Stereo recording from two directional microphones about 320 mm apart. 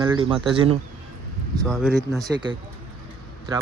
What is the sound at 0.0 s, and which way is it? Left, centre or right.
Speech, centre.